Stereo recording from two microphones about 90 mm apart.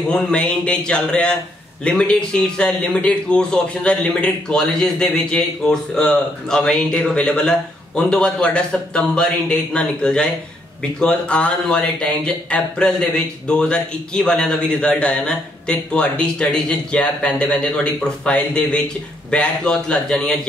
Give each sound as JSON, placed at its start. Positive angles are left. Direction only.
{"t": 0.1, "sound": "a man's voice", "side_deg": 10}